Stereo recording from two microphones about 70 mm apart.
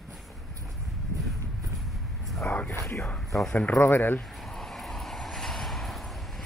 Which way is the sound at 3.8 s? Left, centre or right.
Left.